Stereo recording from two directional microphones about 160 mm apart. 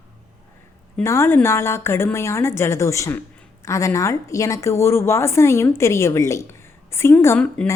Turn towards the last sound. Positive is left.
turn(degrees=10)  # may be behind; listen again after turning